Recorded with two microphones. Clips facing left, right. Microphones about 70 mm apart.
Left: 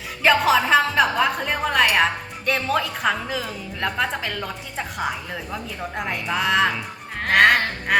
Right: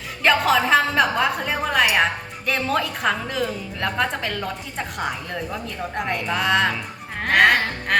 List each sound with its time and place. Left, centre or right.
0.2 s a woman's voice: centre
7.3 s music: centre